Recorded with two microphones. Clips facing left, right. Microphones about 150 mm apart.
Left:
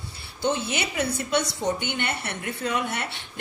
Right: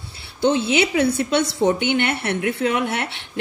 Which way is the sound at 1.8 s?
70° right (ahead or behind).